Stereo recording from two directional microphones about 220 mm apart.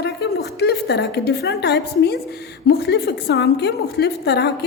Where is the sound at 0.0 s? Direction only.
50° left (ahead or behind).